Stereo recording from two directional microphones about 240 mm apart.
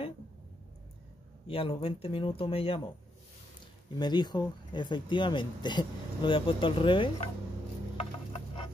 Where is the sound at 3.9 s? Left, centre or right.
Centre.